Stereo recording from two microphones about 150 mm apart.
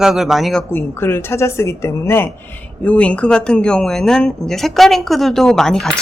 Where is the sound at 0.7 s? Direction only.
15° left (ahead or behind).